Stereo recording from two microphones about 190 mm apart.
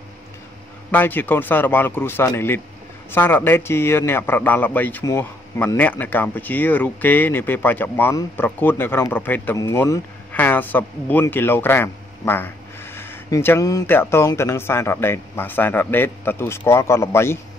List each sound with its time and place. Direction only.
0.9 s a man's voice: 10° left (ahead or behind)